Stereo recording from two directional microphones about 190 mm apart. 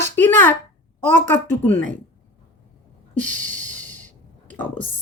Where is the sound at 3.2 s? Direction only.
40° right (ahead or behind).